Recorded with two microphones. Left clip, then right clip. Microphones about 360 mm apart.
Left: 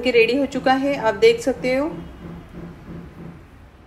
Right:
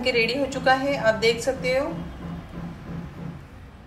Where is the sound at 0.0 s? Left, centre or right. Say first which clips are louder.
Left 6 dB; centre.